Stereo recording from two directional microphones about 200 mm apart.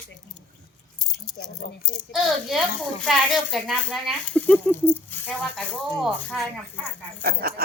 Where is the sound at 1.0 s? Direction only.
Centre (ahead or behind).